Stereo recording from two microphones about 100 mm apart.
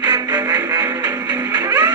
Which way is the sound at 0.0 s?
45° right (ahead or behind).